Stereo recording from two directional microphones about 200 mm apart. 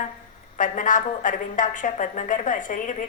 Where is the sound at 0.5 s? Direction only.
40° left (ahead or behind).